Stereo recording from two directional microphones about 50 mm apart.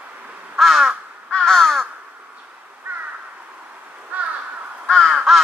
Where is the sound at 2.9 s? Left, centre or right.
Right.